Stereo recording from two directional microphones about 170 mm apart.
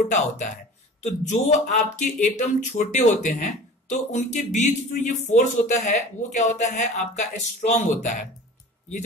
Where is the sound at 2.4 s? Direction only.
45° left (ahead or behind).